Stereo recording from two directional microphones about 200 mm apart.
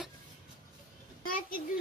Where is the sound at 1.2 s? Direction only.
45° left (ahead or behind).